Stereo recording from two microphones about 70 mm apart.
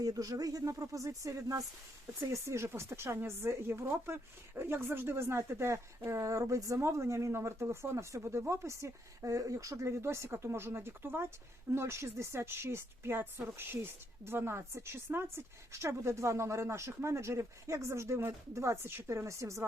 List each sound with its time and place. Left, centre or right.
0.0 s speech: right